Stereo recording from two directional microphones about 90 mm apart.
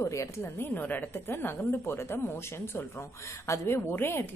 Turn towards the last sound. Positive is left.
turn(degrees=25)  # may be behind; listen again after turning